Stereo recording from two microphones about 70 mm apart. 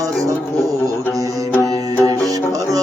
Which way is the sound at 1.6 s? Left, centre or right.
Right.